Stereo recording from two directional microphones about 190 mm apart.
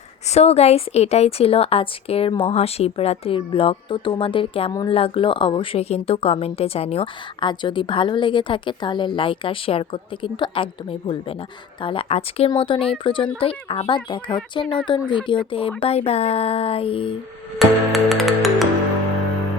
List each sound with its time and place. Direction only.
0.3 s a woman's voice: 35° left (ahead or behind)
17.6 s music: centre (ahead or behind)